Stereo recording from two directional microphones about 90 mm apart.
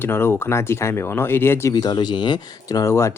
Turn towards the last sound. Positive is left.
turn(degrees=30)  # may be behind; listen again after turning